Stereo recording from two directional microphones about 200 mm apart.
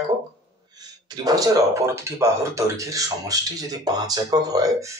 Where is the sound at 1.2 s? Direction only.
20° right (ahead or behind).